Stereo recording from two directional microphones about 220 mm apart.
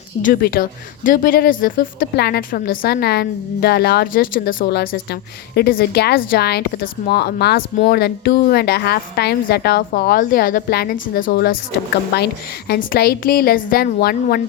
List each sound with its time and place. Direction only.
0.2 s speech: 40° left (ahead or behind)